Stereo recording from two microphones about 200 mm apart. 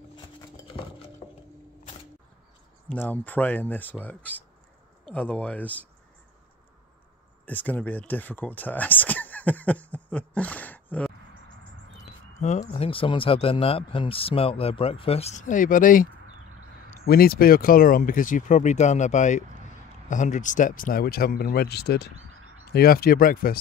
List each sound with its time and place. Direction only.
2.9 s speech: 10° left (ahead or behind)
7.4 s speech: 10° left (ahead or behind)
12.4 s speech: 35° left (ahead or behind)